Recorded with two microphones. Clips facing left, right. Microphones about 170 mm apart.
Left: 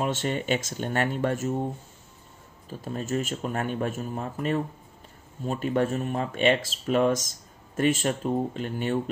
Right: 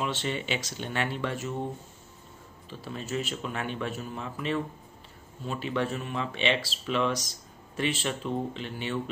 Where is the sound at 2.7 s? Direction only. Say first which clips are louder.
Left 5 dB; 45° left (ahead or behind).